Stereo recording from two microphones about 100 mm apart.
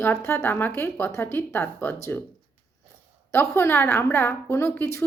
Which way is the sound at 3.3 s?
25° left (ahead or behind).